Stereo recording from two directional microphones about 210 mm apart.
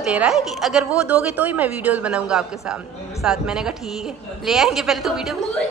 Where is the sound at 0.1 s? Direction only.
5° right (ahead or behind).